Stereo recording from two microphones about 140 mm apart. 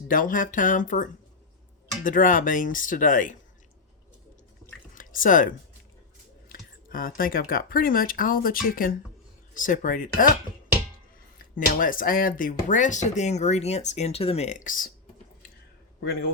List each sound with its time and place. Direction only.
0.1 s speech: 70° left (ahead or behind)
4.9 s speech: 70° left (ahead or behind)
6.5 s speech: 90° left
9.6 s speech: 70° left (ahead or behind)
11.5 s speech: 75° left (ahead or behind)